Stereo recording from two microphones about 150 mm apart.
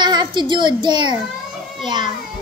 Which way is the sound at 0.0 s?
30° right (ahead or behind).